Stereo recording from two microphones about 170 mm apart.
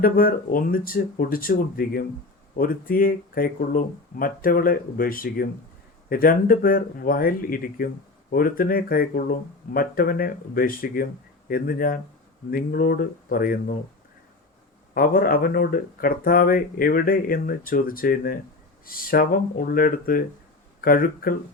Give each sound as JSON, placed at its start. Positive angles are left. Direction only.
{"t": 0.0, "sound": "speech", "side_deg": 60}
{"t": 14.9, "sound": "speech", "side_deg": 60}